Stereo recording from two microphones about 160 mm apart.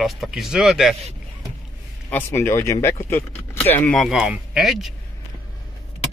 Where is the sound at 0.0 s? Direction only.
Centre (ahead or behind).